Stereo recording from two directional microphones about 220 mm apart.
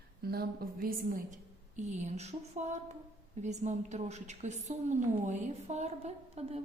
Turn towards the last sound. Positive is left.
turn(degrees=-30)  # may be behind; listen again after turning